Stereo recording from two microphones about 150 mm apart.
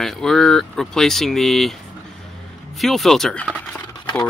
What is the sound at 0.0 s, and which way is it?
Speech, 5° left (ahead or behind).